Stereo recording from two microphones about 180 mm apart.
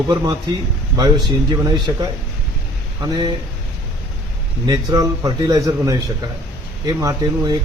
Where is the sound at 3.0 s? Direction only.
20° right (ahead or behind).